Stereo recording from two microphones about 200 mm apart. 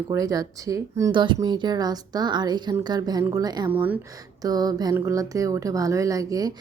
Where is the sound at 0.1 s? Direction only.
15° right (ahead or behind).